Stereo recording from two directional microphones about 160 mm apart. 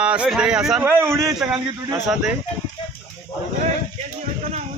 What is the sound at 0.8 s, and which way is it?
Speech, 15° right (ahead or behind).